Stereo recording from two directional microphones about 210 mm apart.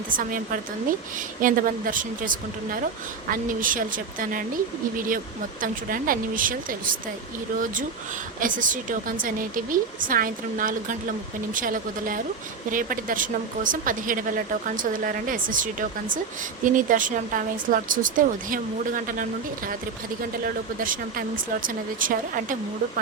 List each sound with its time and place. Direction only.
0.2 s speech: 40° right (ahead or behind)